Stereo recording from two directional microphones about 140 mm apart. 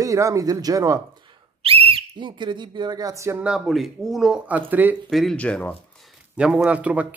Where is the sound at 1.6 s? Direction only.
40° right (ahead or behind); by 3.4 s 20° right (ahead or behind).